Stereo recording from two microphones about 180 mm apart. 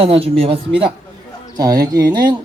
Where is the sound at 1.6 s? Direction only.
20° right (ahead or behind).